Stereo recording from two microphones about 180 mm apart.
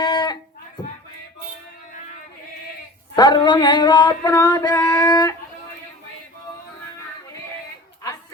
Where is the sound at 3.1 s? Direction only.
25° left (ahead or behind).